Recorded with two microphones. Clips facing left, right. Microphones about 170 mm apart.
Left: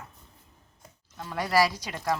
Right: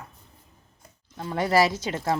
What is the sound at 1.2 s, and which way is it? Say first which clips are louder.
Speech: right 3 dB; 25° right (ahead or behind).